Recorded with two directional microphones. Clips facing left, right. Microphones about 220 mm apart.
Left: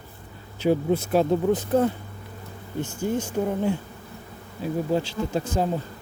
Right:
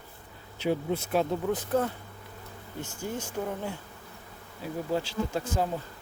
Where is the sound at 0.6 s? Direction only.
40° left (ahead or behind); by 1.9 s 20° left (ahead or behind).